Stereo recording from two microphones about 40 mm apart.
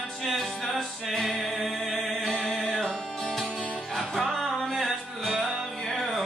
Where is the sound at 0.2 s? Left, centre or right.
Centre.